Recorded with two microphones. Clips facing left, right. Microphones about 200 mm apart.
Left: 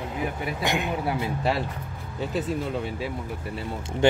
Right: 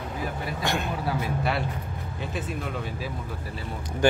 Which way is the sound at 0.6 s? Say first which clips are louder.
Left 2 dB; 15° left (ahead or behind).